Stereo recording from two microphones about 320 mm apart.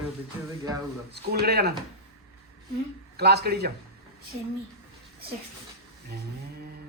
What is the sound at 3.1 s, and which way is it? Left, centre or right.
Speech, right.